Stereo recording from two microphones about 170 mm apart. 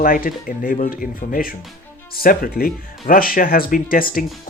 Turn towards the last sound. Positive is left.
turn(degrees=55)  # may be behind; listen again after turning